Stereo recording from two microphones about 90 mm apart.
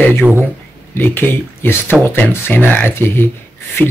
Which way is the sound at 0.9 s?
20° left (ahead or behind).